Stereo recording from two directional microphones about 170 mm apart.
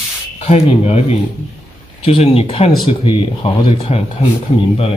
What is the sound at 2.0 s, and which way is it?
Speech, 35° left (ahead or behind).